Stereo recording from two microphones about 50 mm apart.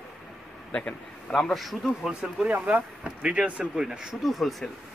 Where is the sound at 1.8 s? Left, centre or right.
Centre.